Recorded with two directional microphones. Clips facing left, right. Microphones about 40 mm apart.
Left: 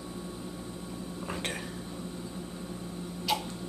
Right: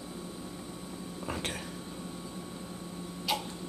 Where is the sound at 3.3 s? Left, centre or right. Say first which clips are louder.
Left 2 dB; centre.